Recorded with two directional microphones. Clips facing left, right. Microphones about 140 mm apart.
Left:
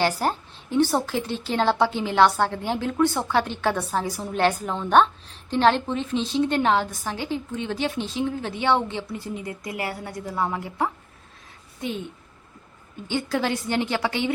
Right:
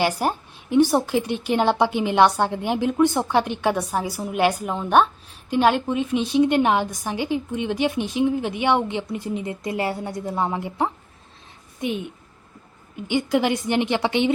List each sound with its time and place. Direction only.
0.0 s a woman's voice: 10° right (ahead or behind)
13.1 s a woman's voice: 15° right (ahead or behind)